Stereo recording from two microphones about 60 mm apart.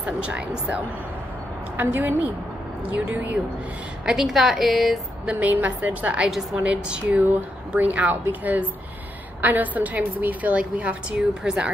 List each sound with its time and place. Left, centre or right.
0.0 s a woman's voice: right
4.0 s a woman's voice: centre
5.2 s a woman's voice: right
6.1 s a woman's voice: centre